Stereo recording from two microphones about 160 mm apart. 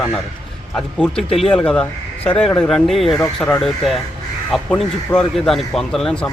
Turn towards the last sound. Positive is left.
turn(degrees=5)  # may be behind; listen again after turning